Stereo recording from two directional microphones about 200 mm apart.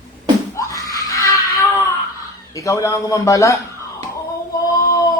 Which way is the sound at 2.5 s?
15° left (ahead or behind).